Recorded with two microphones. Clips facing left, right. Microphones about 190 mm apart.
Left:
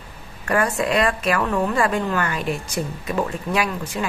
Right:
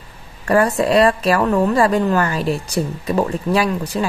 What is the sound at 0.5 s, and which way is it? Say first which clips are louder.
A woman's voice: right 5 dB; 35° right (ahead or behind).